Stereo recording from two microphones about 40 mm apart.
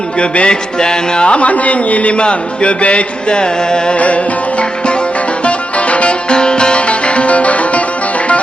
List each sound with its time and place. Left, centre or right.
0.2 s music: left
3.9 s music: left
5.5 s music: left